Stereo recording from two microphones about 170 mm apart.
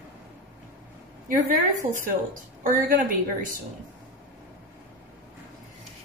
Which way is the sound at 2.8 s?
50° right (ahead or behind).